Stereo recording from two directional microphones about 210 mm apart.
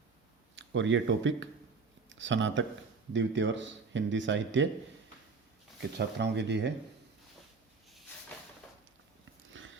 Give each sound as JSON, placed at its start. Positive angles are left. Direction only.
{"t": 0.5, "sound": "speech", "side_deg": -60}
{"t": 6.0, "sound": "speech", "side_deg": -50}
{"t": 9.5, "sound": "a sound", "side_deg": -65}